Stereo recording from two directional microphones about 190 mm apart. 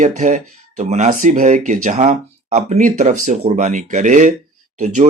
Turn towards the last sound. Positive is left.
turn(degrees=-40)  # may be behind; listen again after turning